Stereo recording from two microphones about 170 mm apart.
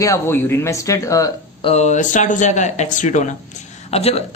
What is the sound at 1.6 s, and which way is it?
Speech, 40° left (ahead or behind).